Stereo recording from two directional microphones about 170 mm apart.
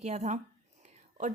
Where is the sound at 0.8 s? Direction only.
45° right (ahead or behind).